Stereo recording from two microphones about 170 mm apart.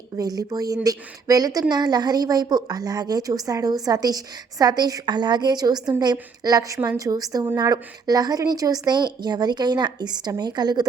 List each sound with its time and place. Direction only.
0.2 s a woman's voice: 20° right (ahead or behind)